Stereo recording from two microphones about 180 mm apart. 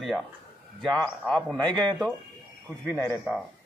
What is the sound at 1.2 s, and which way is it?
Speech, 5° left (ahead or behind).